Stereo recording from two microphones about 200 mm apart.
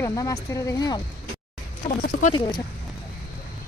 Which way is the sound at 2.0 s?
45° left (ahead or behind).